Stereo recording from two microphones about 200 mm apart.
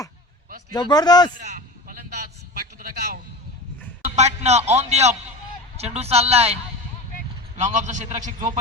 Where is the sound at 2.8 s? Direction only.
45° right (ahead or behind).